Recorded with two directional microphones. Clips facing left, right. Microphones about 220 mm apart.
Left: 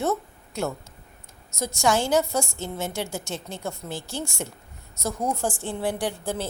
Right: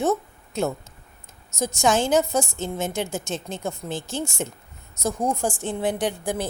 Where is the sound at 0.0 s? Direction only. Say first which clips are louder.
Right 3 dB; 20° right (ahead or behind).